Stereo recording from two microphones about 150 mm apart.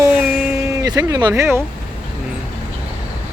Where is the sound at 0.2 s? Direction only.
10° right (ahead or behind).